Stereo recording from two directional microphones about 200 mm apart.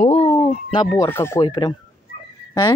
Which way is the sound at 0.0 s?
30° left (ahead or behind).